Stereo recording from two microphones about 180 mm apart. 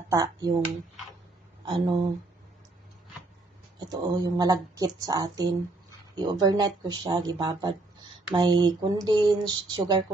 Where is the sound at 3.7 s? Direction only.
20° right (ahead or behind).